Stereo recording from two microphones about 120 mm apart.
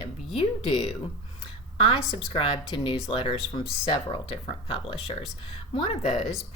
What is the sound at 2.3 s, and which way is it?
Speech, 45° left (ahead or behind).